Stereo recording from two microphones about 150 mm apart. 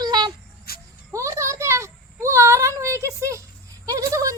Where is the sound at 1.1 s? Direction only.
20° right (ahead or behind).